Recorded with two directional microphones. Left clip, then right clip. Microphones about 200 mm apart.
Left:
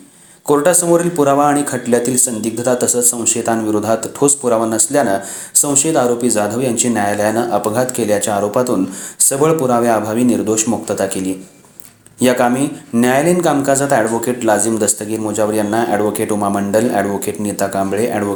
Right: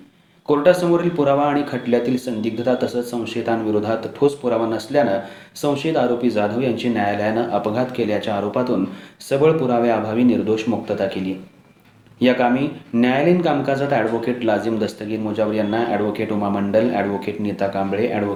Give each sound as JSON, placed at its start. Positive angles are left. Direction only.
{"t": 0.4, "sound": "speech", "side_deg": 45}
{"t": 12.2, "sound": "speech", "side_deg": 45}